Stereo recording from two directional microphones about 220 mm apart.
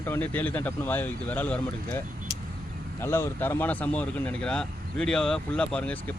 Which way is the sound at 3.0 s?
10° left (ahead or behind).